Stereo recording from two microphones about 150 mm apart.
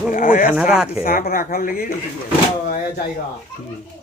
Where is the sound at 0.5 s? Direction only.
5° right (ahead or behind).